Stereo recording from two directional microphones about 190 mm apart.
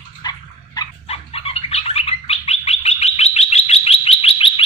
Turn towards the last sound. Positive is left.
turn(degrees=30)  # may be behind; listen again after turning